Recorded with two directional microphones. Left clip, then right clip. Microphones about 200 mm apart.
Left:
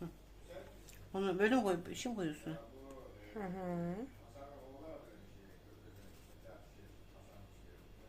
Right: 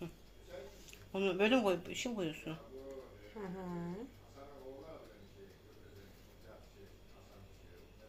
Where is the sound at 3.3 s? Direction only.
50° left (ahead or behind).